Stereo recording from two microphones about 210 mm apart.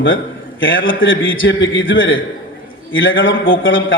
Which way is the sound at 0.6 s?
65° left (ahead or behind).